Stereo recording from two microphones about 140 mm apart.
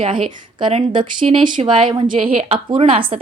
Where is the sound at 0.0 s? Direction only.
35° right (ahead or behind).